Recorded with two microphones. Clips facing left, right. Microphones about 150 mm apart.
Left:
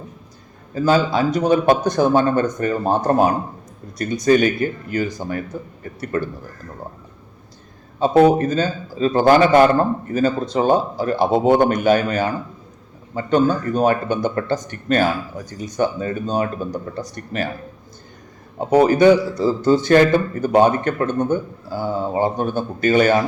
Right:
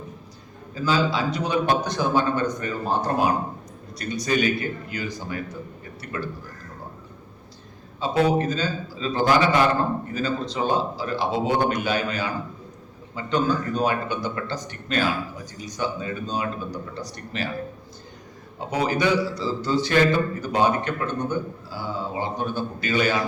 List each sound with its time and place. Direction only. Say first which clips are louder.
0.7 s a man's voice: left 6 dB; 50° left (ahead or behind)
7.9 s a man's voice: left 8 dB; 50° left (ahead or behind)
18.7 s a man's voice: left 10 dB; 50° left (ahead or behind)